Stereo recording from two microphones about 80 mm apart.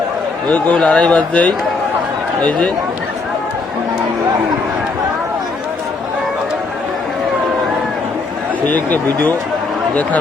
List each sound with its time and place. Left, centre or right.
0.5 s speech: centre
8.6 s speech: left